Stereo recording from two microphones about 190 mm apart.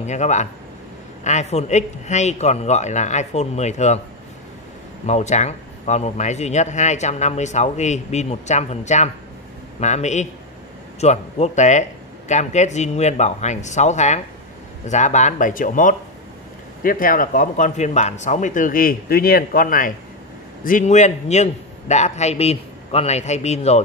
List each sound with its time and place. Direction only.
0.0 s a man's voice: 40° left (ahead or behind)
5.0 s a man's voice: 35° left (ahead or behind)